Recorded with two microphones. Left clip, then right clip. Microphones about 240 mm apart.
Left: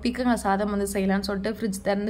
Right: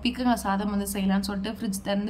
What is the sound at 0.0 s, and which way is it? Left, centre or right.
A woman's voice, centre.